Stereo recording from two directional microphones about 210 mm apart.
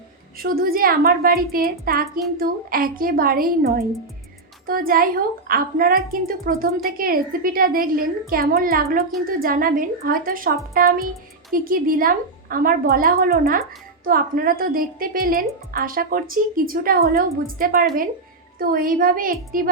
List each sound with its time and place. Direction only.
0.3 s a woman's voice: 45° right (ahead or behind)